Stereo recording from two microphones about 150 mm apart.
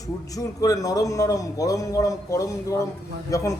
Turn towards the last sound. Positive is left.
turn(degrees=20)  # may be behind; listen again after turning